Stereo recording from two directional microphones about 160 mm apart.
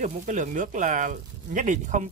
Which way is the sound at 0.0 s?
50° right (ahead or behind).